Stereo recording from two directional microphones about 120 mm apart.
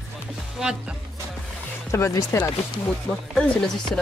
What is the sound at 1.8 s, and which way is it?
Speech, 25° left (ahead or behind).